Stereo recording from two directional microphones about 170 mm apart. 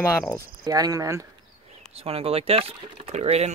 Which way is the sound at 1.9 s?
35° right (ahead or behind).